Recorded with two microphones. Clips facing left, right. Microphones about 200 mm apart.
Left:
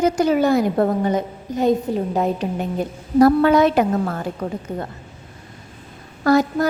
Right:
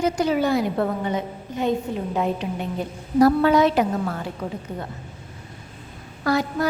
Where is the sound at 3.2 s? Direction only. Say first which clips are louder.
Left 3 dB; 55° left (ahead or behind).